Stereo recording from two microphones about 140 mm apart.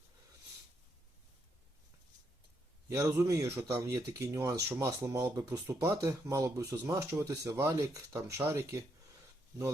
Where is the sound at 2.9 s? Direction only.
20° right (ahead or behind).